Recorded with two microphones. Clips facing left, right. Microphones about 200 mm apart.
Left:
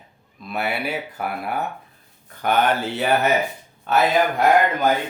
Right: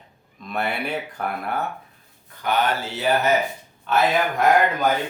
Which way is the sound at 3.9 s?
45° left (ahead or behind).